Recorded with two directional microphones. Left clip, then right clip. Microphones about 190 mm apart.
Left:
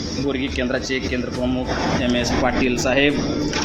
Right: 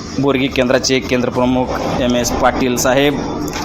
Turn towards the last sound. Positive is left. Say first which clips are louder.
# right 5 dB
turn(degrees=-15)  # may be behind; listen again after turning